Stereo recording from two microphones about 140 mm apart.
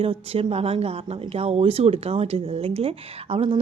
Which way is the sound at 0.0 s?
40° right (ahead or behind).